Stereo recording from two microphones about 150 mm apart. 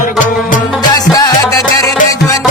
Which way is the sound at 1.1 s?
25° left (ahead or behind).